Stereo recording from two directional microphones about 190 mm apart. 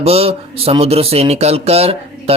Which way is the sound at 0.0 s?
30° right (ahead or behind).